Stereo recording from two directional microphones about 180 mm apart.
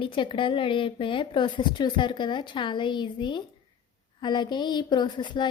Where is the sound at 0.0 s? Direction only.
30° left (ahead or behind).